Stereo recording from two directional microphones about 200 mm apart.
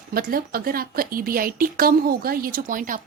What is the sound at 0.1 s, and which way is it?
A woman's voice, 45° right (ahead or behind).